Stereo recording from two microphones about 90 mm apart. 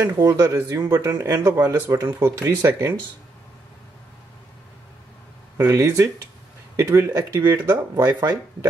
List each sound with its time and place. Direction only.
0.2 s speech: 35° right (ahead or behind)
5.6 s speech: 30° right (ahead or behind)